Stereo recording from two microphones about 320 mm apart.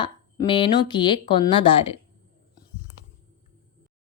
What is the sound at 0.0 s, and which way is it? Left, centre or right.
Speech, centre.